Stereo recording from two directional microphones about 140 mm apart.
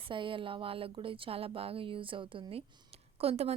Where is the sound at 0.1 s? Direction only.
35° right (ahead or behind).